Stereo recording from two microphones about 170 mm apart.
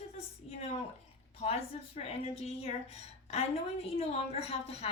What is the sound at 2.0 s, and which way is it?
A woman's voice, 35° left (ahead or behind).